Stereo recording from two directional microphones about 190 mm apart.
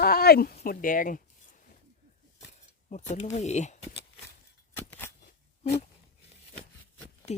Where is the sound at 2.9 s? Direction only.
35° left (ahead or behind).